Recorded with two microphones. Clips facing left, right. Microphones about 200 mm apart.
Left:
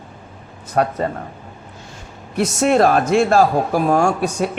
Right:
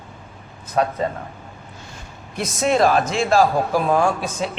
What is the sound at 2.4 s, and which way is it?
Speech, 65° left (ahead or behind).